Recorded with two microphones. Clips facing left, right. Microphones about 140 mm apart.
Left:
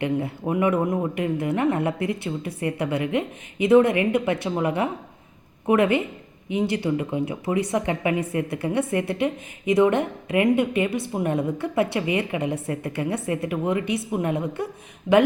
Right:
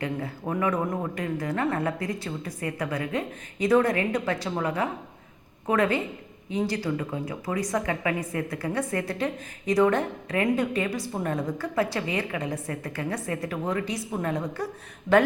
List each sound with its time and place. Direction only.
0.0 s a woman's voice: 25° left (ahead or behind)
0.4 s a woman's voice: 15° left (ahead or behind)
15.1 s speech: 60° left (ahead or behind)